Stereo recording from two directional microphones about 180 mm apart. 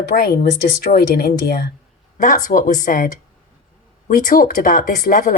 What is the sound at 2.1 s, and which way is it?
Speech, 45° left (ahead or behind).